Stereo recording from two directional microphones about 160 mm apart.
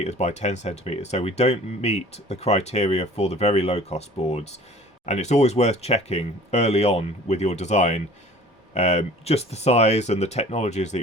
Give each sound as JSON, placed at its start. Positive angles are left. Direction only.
{"t": 0.0, "sound": "speech", "side_deg": 45}